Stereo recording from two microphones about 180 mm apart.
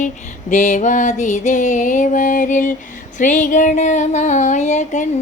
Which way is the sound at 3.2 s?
45° left (ahead or behind).